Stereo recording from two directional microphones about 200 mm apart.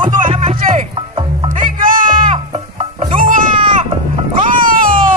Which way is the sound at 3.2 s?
45° right (ahead or behind).